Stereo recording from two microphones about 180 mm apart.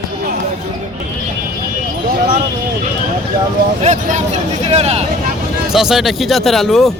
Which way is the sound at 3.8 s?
45° right (ahead or behind).